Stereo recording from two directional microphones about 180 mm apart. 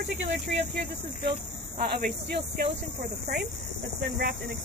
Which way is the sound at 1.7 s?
55° right (ahead or behind).